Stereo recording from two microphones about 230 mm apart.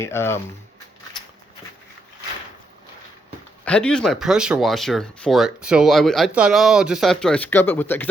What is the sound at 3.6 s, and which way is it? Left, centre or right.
Speech, centre.